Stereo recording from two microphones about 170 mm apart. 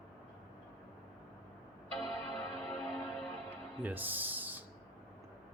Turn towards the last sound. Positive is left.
turn(degrees=-10)  # may be behind; listen again after turning